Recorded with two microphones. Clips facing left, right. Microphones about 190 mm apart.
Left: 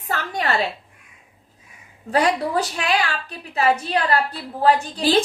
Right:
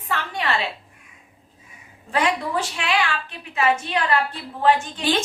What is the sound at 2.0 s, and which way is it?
A woman's voice, 40° left (ahead or behind).